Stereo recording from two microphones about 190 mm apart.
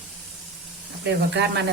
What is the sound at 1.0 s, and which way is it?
Speech, 60° right (ahead or behind).